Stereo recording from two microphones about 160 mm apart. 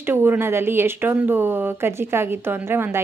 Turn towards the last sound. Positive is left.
turn(degrees=-15)  # may be behind; listen again after turning